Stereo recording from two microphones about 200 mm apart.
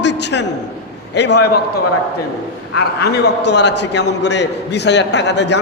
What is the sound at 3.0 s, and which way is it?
A man's voice, 55° left (ahead or behind).